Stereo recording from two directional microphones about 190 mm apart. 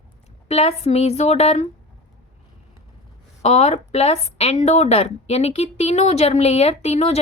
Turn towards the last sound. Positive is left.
turn(degrees=35)  # may be behind; listen again after turning